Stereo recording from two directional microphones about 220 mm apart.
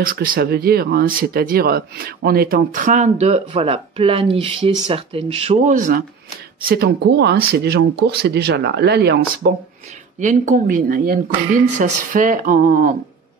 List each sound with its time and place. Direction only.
0.0 s speech: 40° right (ahead or behind)
10.1 s speech: 35° right (ahead or behind)